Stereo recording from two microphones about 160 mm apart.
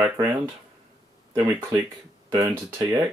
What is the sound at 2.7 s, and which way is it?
Speech, 25° right (ahead or behind).